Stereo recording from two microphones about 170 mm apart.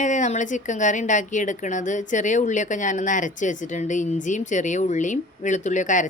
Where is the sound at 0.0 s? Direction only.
45° left (ahead or behind).